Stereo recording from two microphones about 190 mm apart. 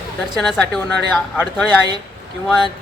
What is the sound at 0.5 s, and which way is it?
Speech, 10° left (ahead or behind).